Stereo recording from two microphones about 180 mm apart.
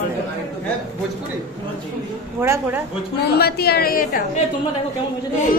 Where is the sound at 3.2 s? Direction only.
60° left (ahead or behind).